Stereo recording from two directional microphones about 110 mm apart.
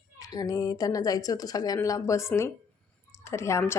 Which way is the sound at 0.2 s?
35° left (ahead or behind).